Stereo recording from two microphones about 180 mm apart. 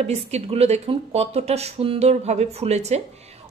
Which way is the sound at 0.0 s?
35° right (ahead or behind).